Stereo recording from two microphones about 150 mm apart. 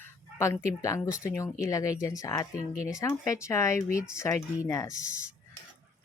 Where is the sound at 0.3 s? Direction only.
20° left (ahead or behind).